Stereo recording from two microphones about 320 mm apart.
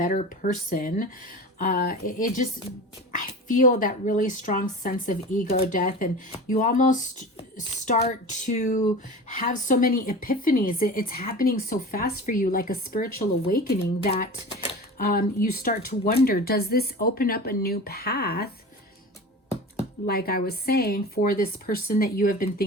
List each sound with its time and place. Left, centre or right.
0.0 s speech: left
20.1 s speech: left